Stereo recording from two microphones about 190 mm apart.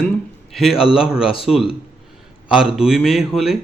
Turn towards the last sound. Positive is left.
turn(degrees=0)  # may be behind; listen again after turning